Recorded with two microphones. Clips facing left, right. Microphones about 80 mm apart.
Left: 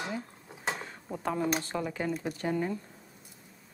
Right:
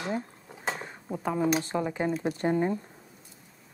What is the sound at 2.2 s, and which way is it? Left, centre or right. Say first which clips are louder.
Speech: right 5 dB; right.